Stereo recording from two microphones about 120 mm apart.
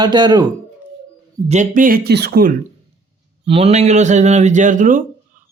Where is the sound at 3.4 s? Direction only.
55° right (ahead or behind); by 5.0 s 90° right.